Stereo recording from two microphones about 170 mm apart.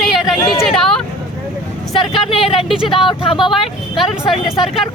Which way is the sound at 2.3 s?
35° left (ahead or behind).